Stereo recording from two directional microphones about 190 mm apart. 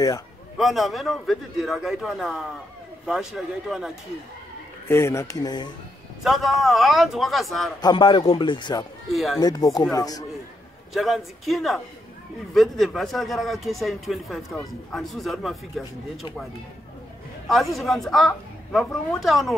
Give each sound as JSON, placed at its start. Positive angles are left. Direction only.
{"t": 0.6, "sound": "a man's voice", "side_deg": 0}
{"t": 4.8, "sound": "speech", "side_deg": 15}
{"t": 6.2, "sound": "a man's voice", "side_deg": 0}
{"t": 7.8, "sound": "speech", "side_deg": 25}
{"t": 9.1, "sound": "a man's voice", "side_deg": 0}
{"t": 9.4, "sound": "speech", "side_deg": 20}
{"t": 10.9, "sound": "a man's voice", "side_deg": 0}
{"t": 17.5, "sound": "a man's voice", "side_deg": 0}